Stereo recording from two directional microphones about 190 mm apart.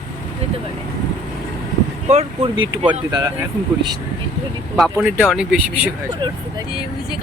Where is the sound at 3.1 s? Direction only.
20° right (ahead or behind).